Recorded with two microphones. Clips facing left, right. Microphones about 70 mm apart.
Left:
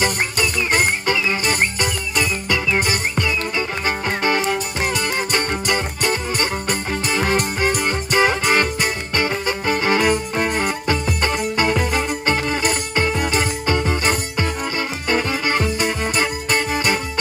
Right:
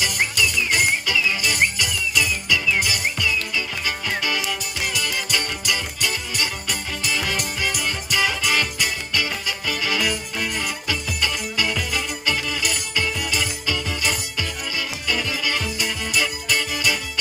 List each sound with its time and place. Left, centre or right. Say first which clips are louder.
0.0 s music: left 3 dB; left